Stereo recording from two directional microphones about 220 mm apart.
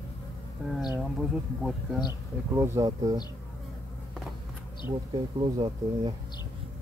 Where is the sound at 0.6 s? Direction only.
5° right (ahead or behind).